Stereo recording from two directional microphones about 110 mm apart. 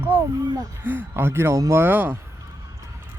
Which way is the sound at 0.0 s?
20° right (ahead or behind).